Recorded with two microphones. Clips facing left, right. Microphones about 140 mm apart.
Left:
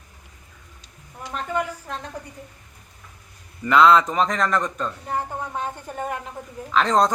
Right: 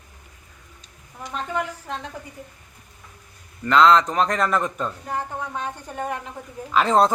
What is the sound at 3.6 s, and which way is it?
Speech, 5° left (ahead or behind).